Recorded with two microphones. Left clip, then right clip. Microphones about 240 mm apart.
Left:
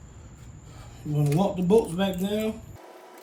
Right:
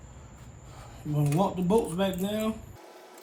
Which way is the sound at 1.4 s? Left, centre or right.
Centre.